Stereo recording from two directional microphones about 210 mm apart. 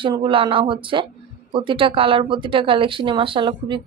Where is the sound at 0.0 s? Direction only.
20° right (ahead or behind).